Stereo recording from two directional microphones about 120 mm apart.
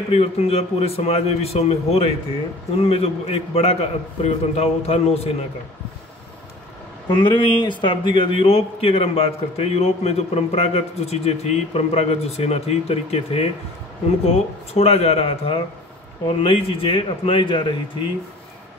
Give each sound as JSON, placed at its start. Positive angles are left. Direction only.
{"t": 0.1, "sound": "a man's voice", "side_deg": 55}
{"t": 7.1, "sound": "a man's voice", "side_deg": 45}